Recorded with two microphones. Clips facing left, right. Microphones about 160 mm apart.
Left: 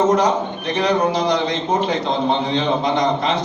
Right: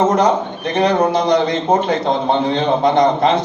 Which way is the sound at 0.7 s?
50° right (ahead or behind).